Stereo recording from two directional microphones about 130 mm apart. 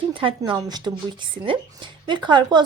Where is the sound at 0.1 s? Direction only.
40° right (ahead or behind).